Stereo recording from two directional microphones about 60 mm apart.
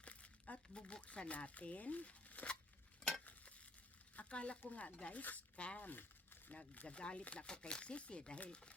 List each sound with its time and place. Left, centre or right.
0.0 s speech: left
3.1 s stir: left
4.1 s a sound: left
4.6 s speech: left
6.8 s speech: centre